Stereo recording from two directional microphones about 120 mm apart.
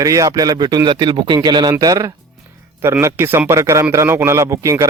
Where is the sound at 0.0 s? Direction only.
30° right (ahead or behind).